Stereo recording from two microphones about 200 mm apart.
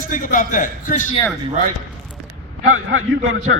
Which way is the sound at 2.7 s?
90° right.